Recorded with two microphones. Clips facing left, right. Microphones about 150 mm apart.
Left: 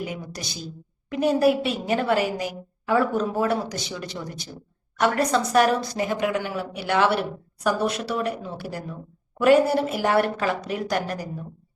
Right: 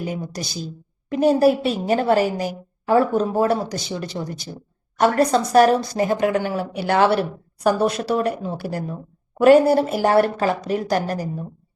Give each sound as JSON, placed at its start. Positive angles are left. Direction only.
{"t": 0.0, "sound": "a woman's voice", "side_deg": -35}